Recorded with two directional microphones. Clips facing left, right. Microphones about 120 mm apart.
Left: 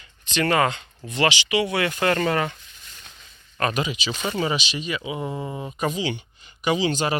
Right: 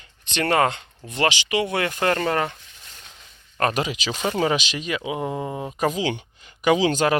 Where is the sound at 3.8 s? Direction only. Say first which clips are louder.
Right 1 dB; 70° right (ahead or behind).